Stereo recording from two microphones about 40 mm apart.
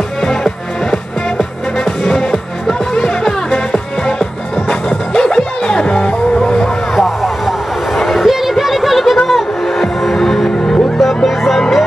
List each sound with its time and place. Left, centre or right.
3.7 s music: centre
5.1 s music: centre
8.0 s a sound: centre
8.3 s music: centre